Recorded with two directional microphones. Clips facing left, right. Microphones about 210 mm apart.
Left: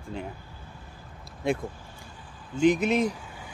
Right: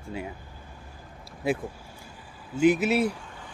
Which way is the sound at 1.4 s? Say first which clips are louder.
Even; 5° right (ahead or behind).